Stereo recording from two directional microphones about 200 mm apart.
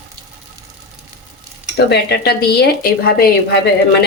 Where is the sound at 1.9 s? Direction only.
55° left (ahead or behind).